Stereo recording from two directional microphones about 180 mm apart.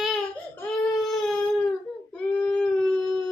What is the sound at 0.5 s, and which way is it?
Baby cry, centre (ahead or behind).